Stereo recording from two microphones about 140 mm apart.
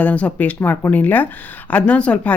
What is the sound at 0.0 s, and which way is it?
A woman's voice, 10° left (ahead or behind).